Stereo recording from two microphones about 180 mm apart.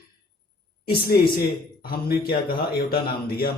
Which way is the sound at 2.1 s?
60° left (ahead or behind).